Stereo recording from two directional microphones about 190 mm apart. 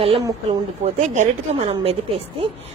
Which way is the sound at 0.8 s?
35° right (ahead or behind).